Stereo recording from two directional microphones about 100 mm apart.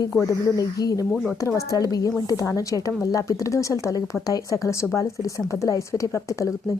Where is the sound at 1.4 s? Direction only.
35° left (ahead or behind).